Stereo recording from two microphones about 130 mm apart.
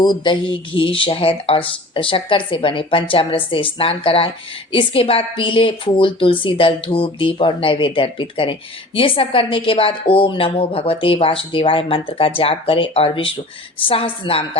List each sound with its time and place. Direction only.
0.0 s a woman's voice: 35° left (ahead or behind)